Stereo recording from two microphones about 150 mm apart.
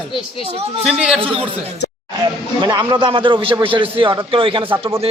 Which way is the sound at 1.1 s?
35° right (ahead or behind).